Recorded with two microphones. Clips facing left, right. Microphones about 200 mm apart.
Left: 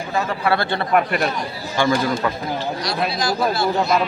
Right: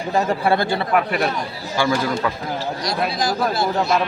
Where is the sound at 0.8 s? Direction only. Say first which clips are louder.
Left 1 dB; centre (ahead or behind).